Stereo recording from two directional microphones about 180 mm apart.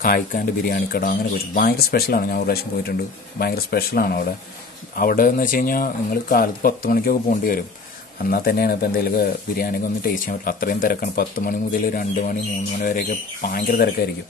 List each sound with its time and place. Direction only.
0.0 s speech: 55° left (ahead or behind)